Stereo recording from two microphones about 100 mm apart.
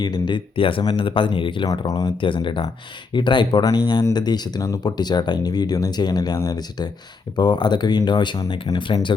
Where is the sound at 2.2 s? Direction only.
55° left (ahead or behind).